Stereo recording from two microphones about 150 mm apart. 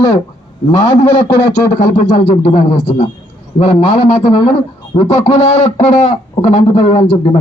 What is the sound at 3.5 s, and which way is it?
Speech, 45° left (ahead or behind).